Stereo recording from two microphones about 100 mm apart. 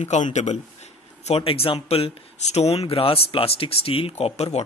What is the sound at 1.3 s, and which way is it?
Speech, 75° left (ahead or behind).